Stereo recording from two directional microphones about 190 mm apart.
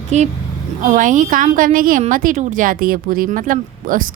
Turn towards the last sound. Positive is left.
turn(degrees=-45)  # may be behind; listen again after turning